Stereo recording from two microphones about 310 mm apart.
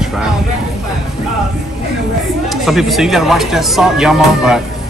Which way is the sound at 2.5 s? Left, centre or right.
Centre.